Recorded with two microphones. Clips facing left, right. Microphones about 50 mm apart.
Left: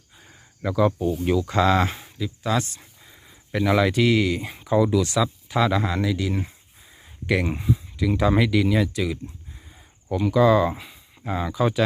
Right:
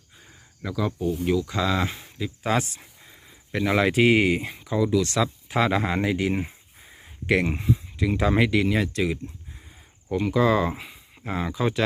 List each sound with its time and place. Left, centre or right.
0.6 s speech: centre
1.5 s speech: left
2.2 s speech: centre
2.8 s a sound: centre; by 4.4 s right
4.6 s speech: centre
5.2 s speech: centre
5.8 s speech: right
7.0 s a sound: centre
7.4 s speech: centre
10.2 s speech: centre